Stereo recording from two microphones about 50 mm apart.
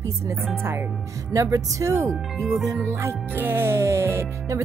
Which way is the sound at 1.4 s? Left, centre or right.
Right.